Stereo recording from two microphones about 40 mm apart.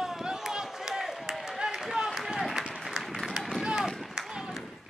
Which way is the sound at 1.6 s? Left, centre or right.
Centre.